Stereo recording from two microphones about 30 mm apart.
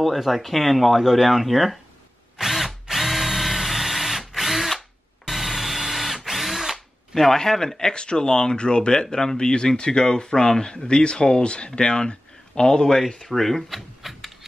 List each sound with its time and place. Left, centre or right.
0.0 s speech: centre
2.3 s drill: centre
7.3 s speech: centre
13.3 s speech: centre
13.7 s a sound: centre